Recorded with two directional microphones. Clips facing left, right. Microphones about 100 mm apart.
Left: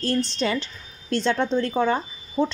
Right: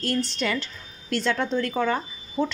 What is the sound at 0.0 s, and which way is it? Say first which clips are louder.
A woman's voice: left 2 dB; 30° left (ahead or behind).